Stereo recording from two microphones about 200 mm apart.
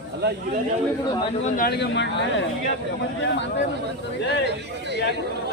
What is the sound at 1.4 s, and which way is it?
Speech, 45° left (ahead or behind).